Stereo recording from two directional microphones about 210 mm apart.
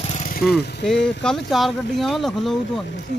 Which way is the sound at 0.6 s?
50° left (ahead or behind).